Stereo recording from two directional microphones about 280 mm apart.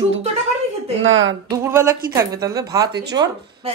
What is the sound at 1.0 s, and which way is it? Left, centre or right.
Speech, right.